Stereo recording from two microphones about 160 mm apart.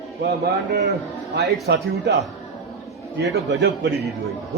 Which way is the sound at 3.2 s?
90° right.